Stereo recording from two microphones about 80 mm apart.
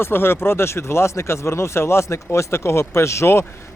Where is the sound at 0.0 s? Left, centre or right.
Left.